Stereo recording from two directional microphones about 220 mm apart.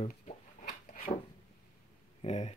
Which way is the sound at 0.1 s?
40° left (ahead or behind).